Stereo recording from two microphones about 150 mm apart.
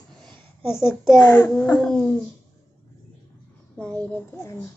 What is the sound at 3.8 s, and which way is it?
Speech, 5° left (ahead or behind).